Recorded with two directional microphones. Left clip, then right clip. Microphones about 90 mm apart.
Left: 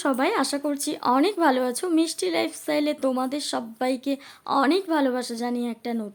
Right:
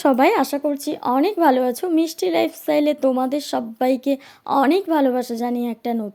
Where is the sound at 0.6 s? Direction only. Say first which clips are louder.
Right 4 dB; 15° right (ahead or behind).